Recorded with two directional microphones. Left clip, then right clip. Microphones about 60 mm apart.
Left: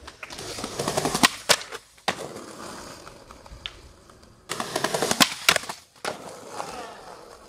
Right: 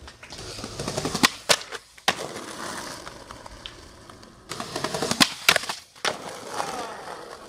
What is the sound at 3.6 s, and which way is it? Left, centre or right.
Vehicle, left.